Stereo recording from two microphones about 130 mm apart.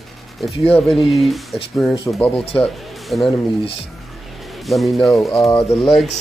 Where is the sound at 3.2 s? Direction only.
40° left (ahead or behind).